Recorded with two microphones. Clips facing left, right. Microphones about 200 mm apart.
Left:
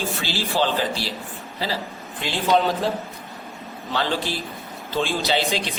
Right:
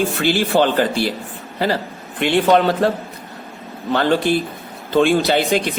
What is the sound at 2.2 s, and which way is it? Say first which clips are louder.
Speech: right 6 dB; 65° right (ahead or behind).